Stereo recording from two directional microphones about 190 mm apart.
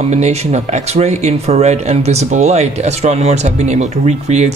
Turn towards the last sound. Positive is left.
turn(degrees=-35)  # may be behind; listen again after turning